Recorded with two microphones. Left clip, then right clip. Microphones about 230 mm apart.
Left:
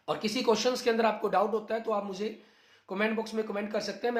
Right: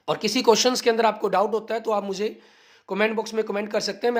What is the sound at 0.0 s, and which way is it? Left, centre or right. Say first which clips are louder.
Speech: right 8 dB; right.